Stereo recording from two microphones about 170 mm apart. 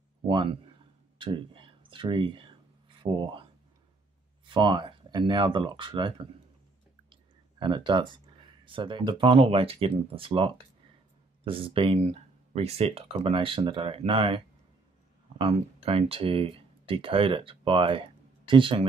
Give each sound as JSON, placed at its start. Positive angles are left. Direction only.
{"t": 0.3, "sound": "speech", "side_deg": -30}
{"t": 1.1, "sound": "a sound", "side_deg": -30}
{"t": 4.5, "sound": "speech", "side_deg": -30}
{"t": 7.1, "sound": "clicking", "side_deg": -25}
{"t": 8.6, "sound": "speech", "side_deg": -30}